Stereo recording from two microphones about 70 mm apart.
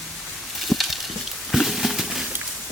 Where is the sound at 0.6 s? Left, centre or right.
Centre.